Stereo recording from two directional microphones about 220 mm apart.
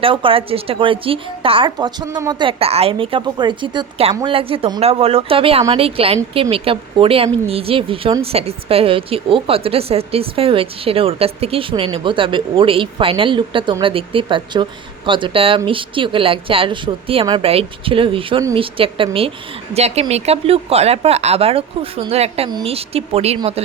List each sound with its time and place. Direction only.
0.0 s speech: 25° right (ahead or behind)